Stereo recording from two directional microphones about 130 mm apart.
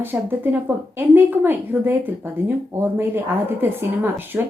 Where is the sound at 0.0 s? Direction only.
15° right (ahead or behind).